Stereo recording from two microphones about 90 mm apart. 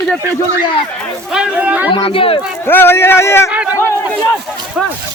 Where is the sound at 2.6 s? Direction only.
25° left (ahead or behind).